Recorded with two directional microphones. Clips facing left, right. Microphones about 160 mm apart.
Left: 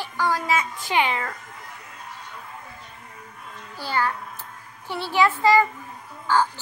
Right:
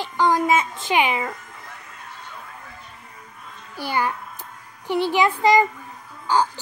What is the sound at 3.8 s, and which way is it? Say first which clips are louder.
Speech: right 1 dB; 15° right (ahead or behind).